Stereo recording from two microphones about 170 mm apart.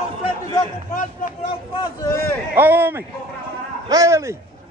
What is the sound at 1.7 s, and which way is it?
Speech, 25° left (ahead or behind).